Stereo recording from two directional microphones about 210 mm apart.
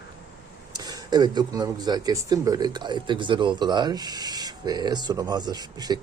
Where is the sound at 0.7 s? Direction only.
20° right (ahead or behind).